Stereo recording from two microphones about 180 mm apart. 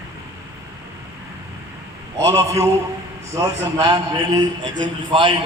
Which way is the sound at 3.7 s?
20° right (ahead or behind).